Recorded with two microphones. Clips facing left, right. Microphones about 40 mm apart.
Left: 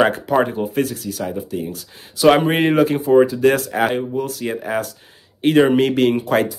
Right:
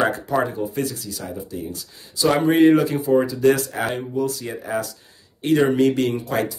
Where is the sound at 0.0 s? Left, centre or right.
Left.